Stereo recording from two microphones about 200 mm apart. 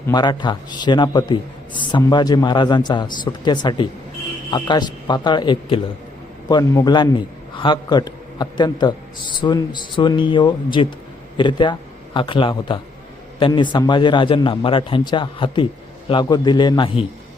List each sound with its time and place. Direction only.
0.1 s a man's voice: 20° left (ahead or behind)